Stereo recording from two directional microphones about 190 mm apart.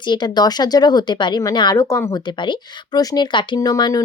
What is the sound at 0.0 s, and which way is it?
Speech, 25° left (ahead or behind).